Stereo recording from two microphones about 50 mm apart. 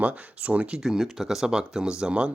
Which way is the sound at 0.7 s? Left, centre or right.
Centre.